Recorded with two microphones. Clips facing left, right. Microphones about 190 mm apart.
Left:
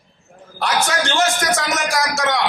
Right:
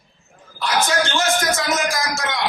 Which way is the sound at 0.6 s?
70° left (ahead or behind).